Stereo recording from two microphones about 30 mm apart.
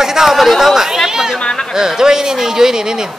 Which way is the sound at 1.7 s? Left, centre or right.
Centre.